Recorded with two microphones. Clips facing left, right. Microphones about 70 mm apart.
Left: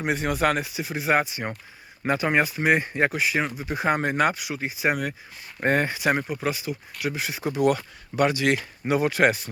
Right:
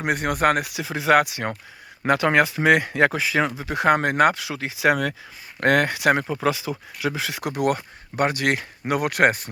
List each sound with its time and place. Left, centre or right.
0.0 s speech: right
0.7 s speech: right
2.0 s speech: right
3.6 s speech: right
5.5 s speech: right
7.1 s speech: right
7.5 s speech: right
8.8 s speech: right